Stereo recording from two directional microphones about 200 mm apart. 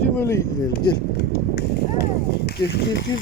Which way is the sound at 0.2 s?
15° left (ahead or behind).